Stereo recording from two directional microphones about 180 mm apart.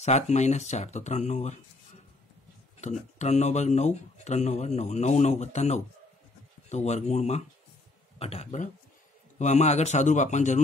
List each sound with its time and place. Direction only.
0.0 s speech: 40° left (ahead or behind)
2.8 s speech: 40° left (ahead or behind)